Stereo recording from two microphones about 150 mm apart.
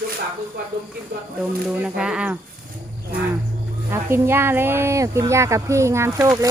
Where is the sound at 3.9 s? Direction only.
15° right (ahead or behind).